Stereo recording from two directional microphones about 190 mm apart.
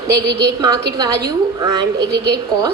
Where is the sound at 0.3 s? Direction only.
60° right (ahead or behind).